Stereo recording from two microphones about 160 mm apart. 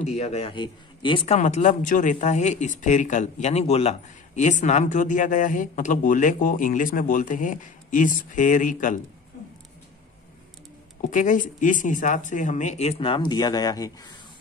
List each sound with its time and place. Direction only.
0.0 s speech: 45° left (ahead or behind)
11.0 s speech: 55° left (ahead or behind); by 14.1 s 25° left (ahead or behind)